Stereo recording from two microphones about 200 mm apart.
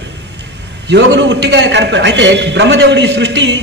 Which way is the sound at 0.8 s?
60° right (ahead or behind).